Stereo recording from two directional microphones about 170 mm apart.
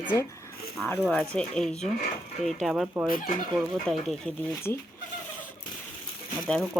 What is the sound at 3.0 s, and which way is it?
Speech, 55° left (ahead or behind).